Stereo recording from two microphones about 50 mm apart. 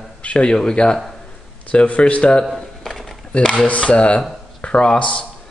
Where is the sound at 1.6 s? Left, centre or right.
Left.